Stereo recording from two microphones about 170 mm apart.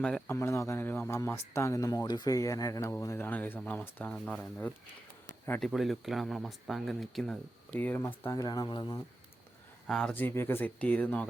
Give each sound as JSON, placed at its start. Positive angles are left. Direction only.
{"t": 0.3, "sound": "a man's voice", "side_deg": 15}
{"t": 9.8, "sound": "a man's voice", "side_deg": 5}